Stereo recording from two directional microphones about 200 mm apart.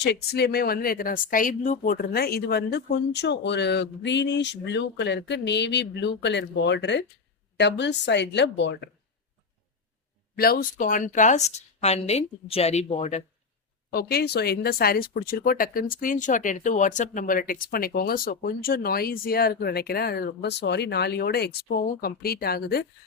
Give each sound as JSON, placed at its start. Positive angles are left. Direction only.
{"t": 0.0, "sound": "a woman's voice", "side_deg": 55}
{"t": 10.3, "sound": "a woman's voice", "side_deg": 50}
{"t": 13.9, "sound": "speech", "side_deg": 50}